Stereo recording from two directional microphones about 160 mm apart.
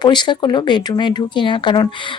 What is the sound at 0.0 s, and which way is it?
Speech, 25° left (ahead or behind).